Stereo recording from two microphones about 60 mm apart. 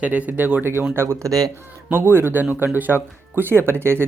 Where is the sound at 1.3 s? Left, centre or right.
Right.